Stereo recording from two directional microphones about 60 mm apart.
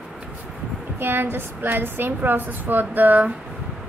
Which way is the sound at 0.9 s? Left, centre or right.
Right.